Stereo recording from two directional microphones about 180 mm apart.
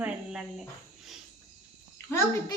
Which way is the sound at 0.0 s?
5° right (ahead or behind).